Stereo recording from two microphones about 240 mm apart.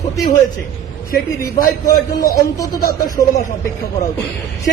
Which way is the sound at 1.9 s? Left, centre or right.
Centre.